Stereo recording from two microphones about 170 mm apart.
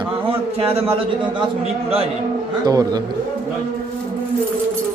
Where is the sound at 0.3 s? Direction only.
35° right (ahead or behind).